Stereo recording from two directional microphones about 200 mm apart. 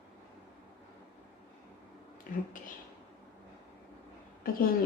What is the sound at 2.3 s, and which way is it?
Speech, 40° left (ahead or behind).